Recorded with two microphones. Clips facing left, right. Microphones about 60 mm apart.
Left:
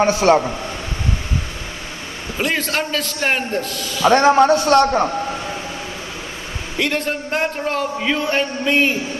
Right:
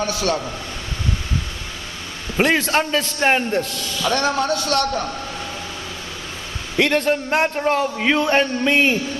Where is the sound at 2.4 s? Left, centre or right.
Right.